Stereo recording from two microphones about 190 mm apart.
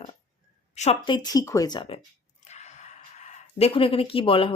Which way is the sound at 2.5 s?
35° left (ahead or behind).